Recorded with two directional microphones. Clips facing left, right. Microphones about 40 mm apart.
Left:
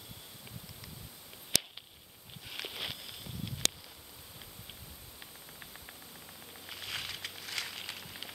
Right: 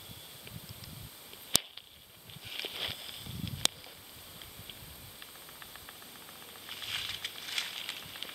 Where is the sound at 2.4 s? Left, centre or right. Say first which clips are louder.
Right 2 dB; centre.